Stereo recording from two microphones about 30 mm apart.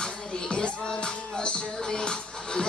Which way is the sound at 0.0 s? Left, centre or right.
Left.